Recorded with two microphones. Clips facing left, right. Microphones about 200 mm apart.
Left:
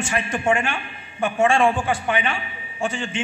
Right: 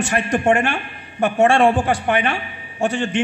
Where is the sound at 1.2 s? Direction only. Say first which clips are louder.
Right 4 dB; 65° right (ahead or behind).